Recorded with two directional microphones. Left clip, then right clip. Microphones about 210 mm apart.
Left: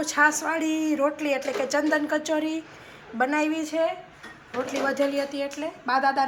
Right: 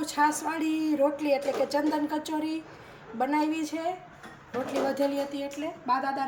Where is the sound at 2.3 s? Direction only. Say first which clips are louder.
Left 5 dB; 30° left (ahead or behind).